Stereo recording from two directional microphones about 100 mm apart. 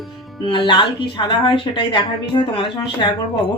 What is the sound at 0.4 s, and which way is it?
A woman's voice, 55° left (ahead or behind).